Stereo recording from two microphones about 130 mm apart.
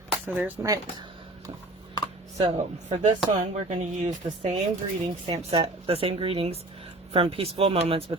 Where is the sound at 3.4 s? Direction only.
60° right (ahead or behind).